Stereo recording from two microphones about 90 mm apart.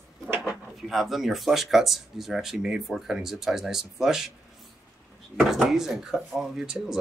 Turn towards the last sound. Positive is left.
turn(degrees=-5)  # may be behind; listen again after turning